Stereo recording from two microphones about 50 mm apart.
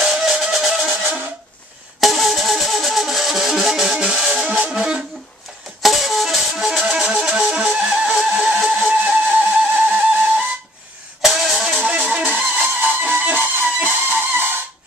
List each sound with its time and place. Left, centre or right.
0.0 s music: centre
0.8 s music: right
2.0 s music: centre
5.8 s music: centre
6.8 s music: centre
8.6 s steam whistle: right
11.2 s vehicle: centre
11.8 s music: right
12.2 s music: right